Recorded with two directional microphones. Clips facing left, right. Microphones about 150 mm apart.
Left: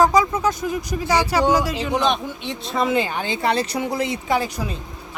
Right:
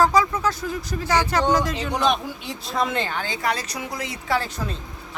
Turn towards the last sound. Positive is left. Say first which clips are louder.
# left 3 dB
turn(degrees=10)  # may be behind; listen again after turning